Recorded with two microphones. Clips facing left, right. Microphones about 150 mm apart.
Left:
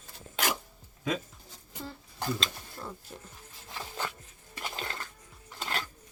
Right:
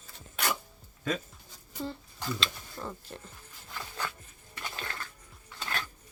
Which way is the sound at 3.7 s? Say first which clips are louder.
Left 1 dB; 25° left (ahead or behind).